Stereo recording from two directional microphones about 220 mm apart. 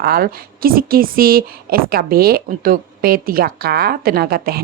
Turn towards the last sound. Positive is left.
turn(degrees=-45)  # may be behind; listen again after turning